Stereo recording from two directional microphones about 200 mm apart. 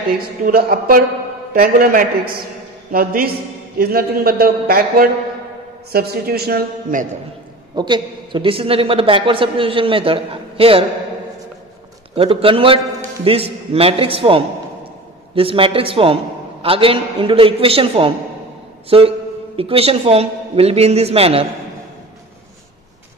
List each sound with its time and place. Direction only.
0.5 s a man's voice: 45° right (ahead or behind)
7.7 s a man's voice: 20° right (ahead or behind)
12.2 s a man's voice: 30° right (ahead or behind)